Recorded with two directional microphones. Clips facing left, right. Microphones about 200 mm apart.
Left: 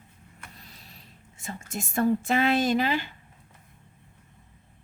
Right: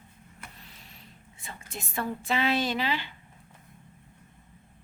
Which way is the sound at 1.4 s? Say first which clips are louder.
Left 6 dB; 45° left (ahead or behind).